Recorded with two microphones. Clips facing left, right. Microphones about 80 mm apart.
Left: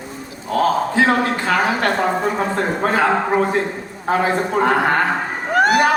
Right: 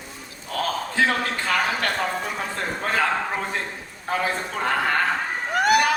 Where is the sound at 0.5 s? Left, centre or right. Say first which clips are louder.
Left 8 dB; left.